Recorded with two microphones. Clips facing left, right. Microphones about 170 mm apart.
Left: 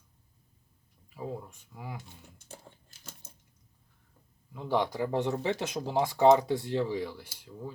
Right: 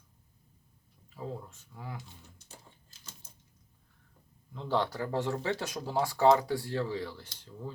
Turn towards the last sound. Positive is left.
turn(degrees=10)  # may be behind; listen again after turning